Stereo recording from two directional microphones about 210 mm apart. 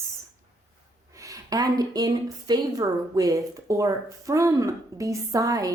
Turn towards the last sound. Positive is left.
turn(degrees=-15)  # may be behind; listen again after turning